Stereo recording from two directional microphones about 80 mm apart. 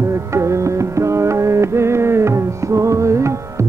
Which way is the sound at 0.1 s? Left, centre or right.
Right.